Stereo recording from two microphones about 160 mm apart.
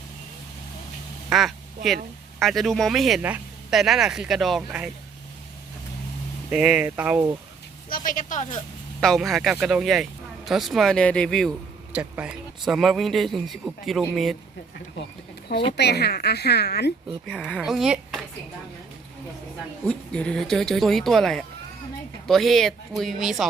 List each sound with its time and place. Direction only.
1.3 s speech: centre (ahead or behind)
6.5 s speech: 5° right (ahead or behind)
7.9 s speech: 60° left (ahead or behind)
9.0 s speech: centre (ahead or behind)
11.9 s speech: 10° right (ahead or behind)
15.8 s a woman's voice: 90° left
17.2 s speech: 5° left (ahead or behind)
19.9 s speech: 5° left (ahead or behind)